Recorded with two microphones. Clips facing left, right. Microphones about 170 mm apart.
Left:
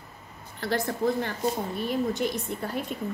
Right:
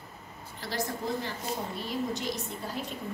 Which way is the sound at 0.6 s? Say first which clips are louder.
Left 7 dB; 60° left (ahead or behind).